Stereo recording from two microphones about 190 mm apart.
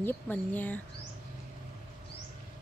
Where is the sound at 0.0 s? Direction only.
10° left (ahead or behind).